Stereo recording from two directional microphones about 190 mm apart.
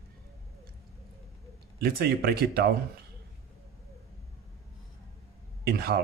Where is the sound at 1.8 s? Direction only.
55° right (ahead or behind).